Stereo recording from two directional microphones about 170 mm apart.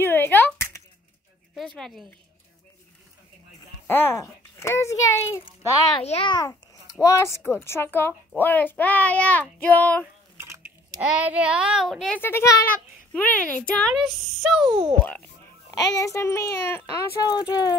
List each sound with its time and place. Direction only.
0.0 s a sound: 15° left (ahead or behind)
1.8 s a child's voice: centre (ahead or behind)
3.8 s a child's voice: 10° left (ahead or behind)
6.0 s a child's voice: 30° left (ahead or behind); by 10.0 s 10° left (ahead or behind)
10.3 s a child's voice: 15° right (ahead or behind); by 14.8 s centre (ahead or behind)
15.7 s a child's voice: 20° left (ahead or behind)